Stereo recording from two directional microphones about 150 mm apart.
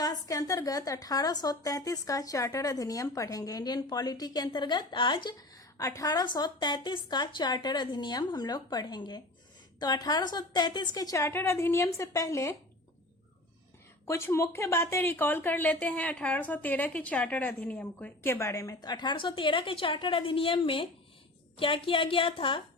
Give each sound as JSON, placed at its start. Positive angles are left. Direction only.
{"t": 0.0, "sound": "a woman's voice", "side_deg": 25}
{"t": 5.7, "sound": "a woman's voice", "side_deg": 20}
{"t": 14.0, "sound": "a woman's voice", "side_deg": 15}